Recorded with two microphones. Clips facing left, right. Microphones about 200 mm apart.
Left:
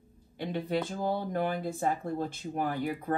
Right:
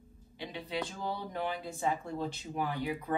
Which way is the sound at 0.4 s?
50° left (ahead or behind).